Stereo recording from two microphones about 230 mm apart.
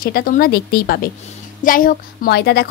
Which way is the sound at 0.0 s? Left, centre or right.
Left.